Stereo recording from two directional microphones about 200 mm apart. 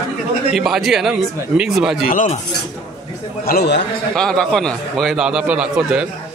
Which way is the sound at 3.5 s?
55° left (ahead or behind).